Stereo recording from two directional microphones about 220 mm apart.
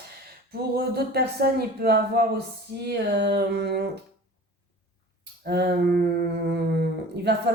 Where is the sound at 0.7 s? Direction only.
45° right (ahead or behind).